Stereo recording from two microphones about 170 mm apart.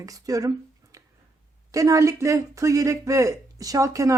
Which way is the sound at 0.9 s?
20° right (ahead or behind).